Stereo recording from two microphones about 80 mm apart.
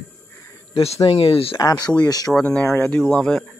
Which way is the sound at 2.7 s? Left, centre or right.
Left.